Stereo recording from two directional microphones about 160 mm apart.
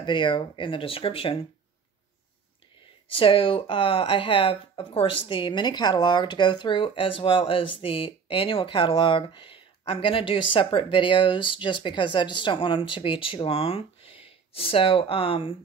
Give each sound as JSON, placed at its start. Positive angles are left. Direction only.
{"t": 0.0, "sound": "speech", "side_deg": 30}
{"t": 3.1, "sound": "speech", "side_deg": 35}